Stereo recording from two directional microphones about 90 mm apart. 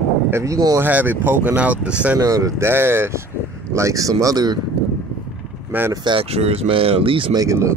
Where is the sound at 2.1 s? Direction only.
40° right (ahead or behind).